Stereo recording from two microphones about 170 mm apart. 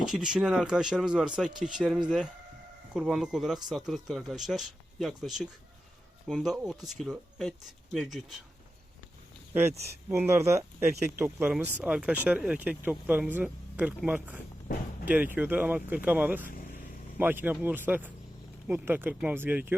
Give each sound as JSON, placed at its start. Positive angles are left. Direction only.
{"t": 0.0, "sound": "speech", "side_deg": -5}
{"t": 9.5, "sound": "speech", "side_deg": -10}
{"t": 16.4, "sound": "speech", "side_deg": 55}
{"t": 17.2, "sound": "speech", "side_deg": -10}